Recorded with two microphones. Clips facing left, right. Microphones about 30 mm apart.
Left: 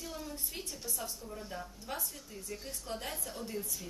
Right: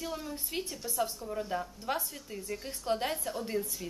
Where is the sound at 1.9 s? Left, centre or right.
Right.